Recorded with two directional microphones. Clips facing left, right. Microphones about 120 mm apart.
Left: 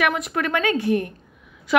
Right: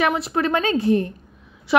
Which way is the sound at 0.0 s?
25° right (ahead or behind).